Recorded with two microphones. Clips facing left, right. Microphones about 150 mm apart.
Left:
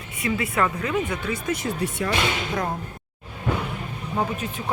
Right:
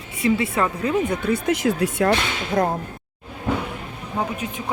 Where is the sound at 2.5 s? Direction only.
40° right (ahead or behind).